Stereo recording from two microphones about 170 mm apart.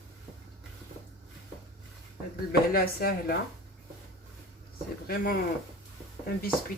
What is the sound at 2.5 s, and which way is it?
Speech, 60° left (ahead or behind).